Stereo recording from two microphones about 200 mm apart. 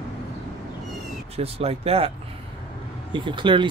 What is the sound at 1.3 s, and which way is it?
Speech, 30° right (ahead or behind).